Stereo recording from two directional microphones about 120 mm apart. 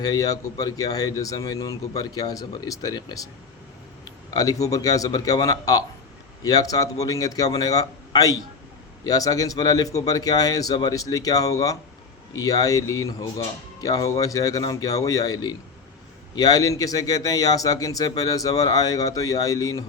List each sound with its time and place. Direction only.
0.0 s speech: 30° left (ahead or behind)
4.3 s speech: 30° left (ahead or behind)